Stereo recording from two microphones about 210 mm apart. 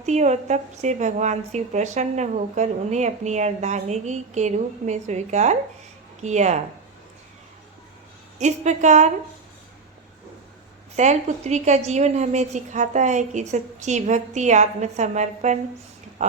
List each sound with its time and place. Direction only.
0.0 s a woman's voice: 35° right (ahead or behind)
8.4 s a woman's voice: 35° right (ahead or behind)
10.9 s a woman's voice: 35° right (ahead or behind)